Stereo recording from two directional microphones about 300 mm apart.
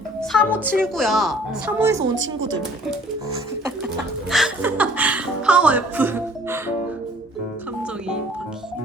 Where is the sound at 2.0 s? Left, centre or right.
Right.